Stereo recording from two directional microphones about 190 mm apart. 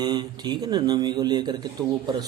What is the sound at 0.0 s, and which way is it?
Speech, 20° right (ahead or behind).